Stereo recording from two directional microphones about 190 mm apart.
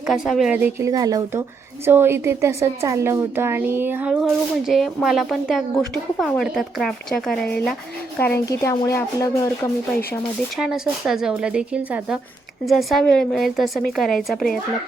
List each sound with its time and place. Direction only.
0.1 s a woman's voice: centre (ahead or behind)
8.2 s speech: 15° left (ahead or behind)
10.6 s speech: centre (ahead or behind)